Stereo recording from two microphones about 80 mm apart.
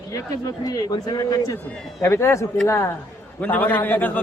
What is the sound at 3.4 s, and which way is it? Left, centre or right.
Speech, centre.